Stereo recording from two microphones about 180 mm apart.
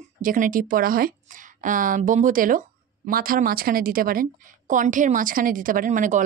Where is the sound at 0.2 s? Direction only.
50° right (ahead or behind).